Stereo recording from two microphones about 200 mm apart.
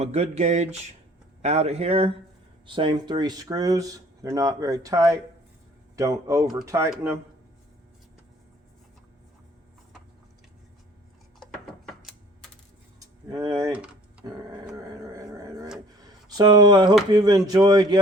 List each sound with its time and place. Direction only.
0.0 s a sound: 30° right (ahead or behind)
2.6 s speech: 25° right (ahead or behind)
11.3 s a sound: centre (ahead or behind)
13.3 s speech: 20° right (ahead or behind)
13.7 s typing: 5° right (ahead or behind)
14.8 s dog: 15° right (ahead or behind)
16.4 s speech: 20° right (ahead or behind)